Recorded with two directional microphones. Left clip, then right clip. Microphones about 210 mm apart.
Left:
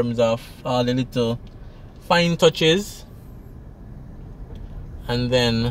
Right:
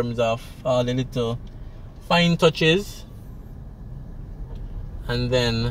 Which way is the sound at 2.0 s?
30° left (ahead or behind).